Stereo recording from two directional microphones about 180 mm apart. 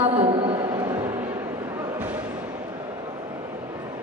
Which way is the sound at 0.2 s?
30° right (ahead or behind).